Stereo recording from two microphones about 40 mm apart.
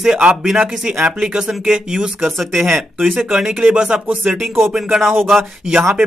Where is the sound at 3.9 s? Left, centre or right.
Right.